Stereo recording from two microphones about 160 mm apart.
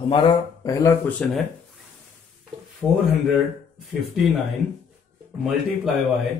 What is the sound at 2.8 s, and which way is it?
Speech, 5° right (ahead or behind).